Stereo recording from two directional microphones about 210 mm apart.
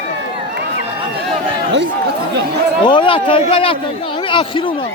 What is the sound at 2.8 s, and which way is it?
Speech, 25° left (ahead or behind).